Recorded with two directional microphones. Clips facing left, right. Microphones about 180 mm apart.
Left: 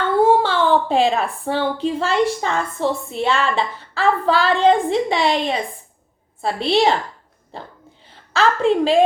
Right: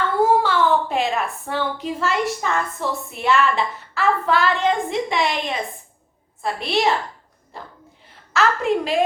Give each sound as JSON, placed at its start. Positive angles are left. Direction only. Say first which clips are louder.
{"t": 0.2, "sound": "a woman's voice", "louder": "left 2 dB", "side_deg": 30}